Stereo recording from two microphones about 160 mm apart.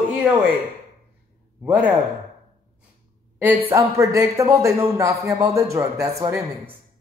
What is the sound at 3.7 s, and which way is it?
Speech, 20° right (ahead or behind).